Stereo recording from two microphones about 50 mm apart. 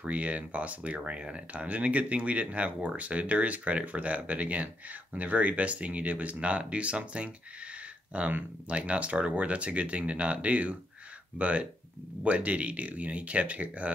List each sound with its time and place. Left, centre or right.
0.0 s speech: right